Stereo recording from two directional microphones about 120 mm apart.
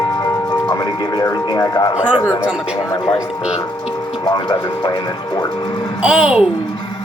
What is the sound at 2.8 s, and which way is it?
Speech, 30° left (ahead or behind).